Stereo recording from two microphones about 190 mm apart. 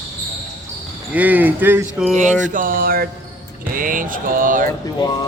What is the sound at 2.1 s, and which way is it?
Music, 40° right (ahead or behind).